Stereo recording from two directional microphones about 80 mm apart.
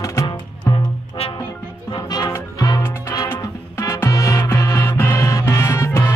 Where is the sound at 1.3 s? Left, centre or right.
Left.